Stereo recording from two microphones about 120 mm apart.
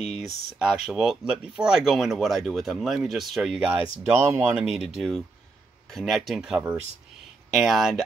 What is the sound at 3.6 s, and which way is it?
Speech, 10° right (ahead or behind).